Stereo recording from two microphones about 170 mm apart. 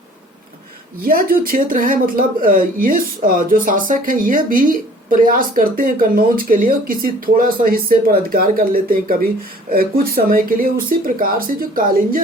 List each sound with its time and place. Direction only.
1.0 s speech: 55° right (ahead or behind)